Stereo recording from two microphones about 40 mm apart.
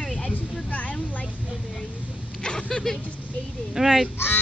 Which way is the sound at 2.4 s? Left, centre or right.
Left.